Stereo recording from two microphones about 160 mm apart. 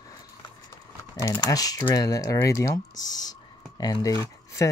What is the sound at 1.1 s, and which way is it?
Speech, 25° left (ahead or behind).